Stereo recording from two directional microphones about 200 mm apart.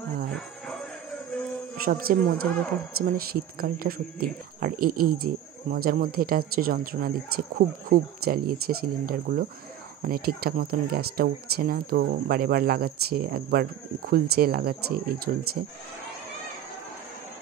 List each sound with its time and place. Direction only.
1.9 s speech: 45° right (ahead or behind)